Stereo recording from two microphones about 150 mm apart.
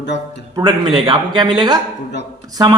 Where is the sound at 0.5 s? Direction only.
30° right (ahead or behind).